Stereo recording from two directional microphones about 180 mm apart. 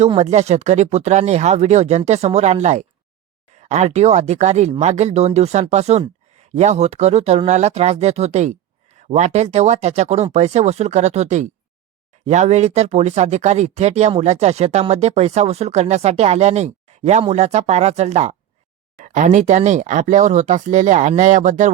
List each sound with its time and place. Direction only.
0.2 s speech: 40° right (ahead or behind)